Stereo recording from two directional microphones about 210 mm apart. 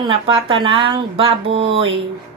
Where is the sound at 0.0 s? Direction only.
25° right (ahead or behind).